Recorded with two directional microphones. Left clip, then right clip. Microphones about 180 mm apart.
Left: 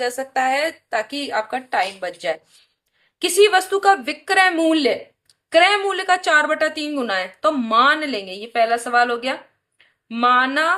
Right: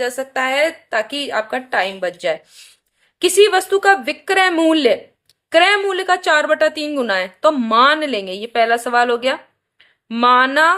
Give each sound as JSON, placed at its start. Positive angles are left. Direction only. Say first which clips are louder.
{"t": 0.0, "sound": "a woman's voice", "louder": "right 1 dB", "side_deg": -40}